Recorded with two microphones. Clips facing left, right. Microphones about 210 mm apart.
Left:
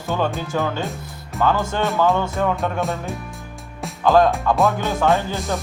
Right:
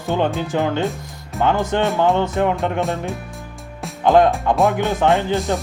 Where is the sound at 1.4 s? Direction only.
20° right (ahead or behind).